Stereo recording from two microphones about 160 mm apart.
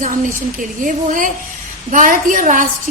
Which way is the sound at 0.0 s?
55° right (ahead or behind).